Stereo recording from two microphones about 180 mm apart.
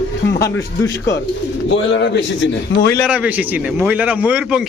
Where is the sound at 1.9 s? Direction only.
80° left.